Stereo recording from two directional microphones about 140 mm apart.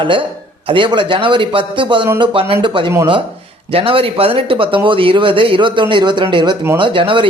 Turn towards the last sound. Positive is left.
turn(degrees=-40)  # may be behind; listen again after turning